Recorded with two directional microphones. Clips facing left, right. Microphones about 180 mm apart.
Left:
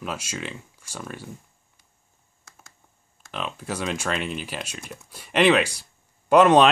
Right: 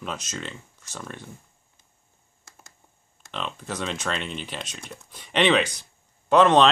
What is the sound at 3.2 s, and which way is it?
Speech, 5° left (ahead or behind).